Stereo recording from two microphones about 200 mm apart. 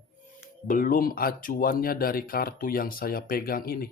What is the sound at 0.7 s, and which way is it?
Speech, 45° left (ahead or behind).